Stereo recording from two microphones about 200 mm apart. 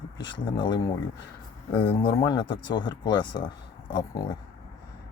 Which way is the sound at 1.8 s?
25° left (ahead or behind).